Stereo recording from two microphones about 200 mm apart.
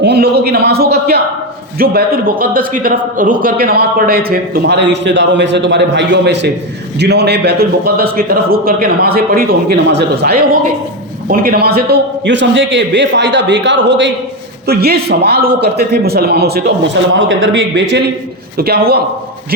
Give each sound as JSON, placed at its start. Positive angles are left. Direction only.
{"t": 0.0, "sound": "a sound", "side_deg": -55}
{"t": 1.8, "sound": "a man's voice", "side_deg": -50}
{"t": 14.7, "sound": "speech", "side_deg": -50}
{"t": 17.2, "sound": "a man's voice", "side_deg": -70}